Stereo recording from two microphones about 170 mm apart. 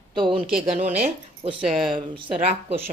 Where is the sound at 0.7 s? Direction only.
55° right (ahead or behind).